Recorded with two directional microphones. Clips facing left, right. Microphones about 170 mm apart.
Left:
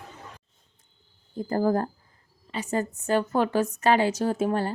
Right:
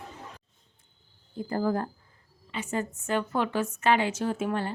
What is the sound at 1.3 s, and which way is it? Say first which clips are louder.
Speech: left 4 dB; 40° left (ahead or behind).